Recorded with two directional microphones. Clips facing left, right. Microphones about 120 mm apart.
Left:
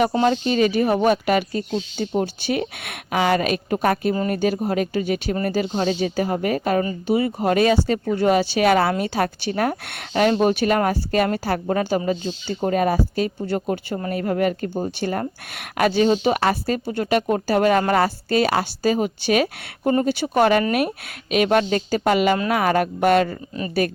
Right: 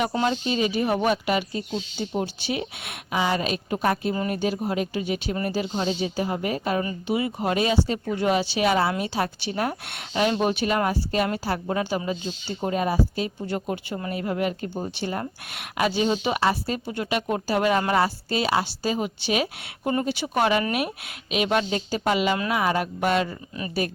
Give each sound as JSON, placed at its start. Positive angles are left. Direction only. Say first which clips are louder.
{"t": 0.3, "sound": "speech", "louder": "left 6 dB", "side_deg": 50}
{"t": 5.8, "sound": "speech", "louder": "left 4 dB", "side_deg": 60}
{"t": 6.8, "sound": "speech", "louder": "left 5 dB", "side_deg": 40}
{"t": 8.0, "sound": "speech", "louder": "left 5 dB", "side_deg": 35}
{"t": 14.1, "sound": "speech", "louder": "left 5 dB", "side_deg": 50}